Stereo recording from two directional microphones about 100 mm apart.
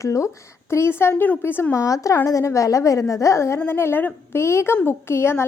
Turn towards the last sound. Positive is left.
turn(degrees=25)  # may be behind; listen again after turning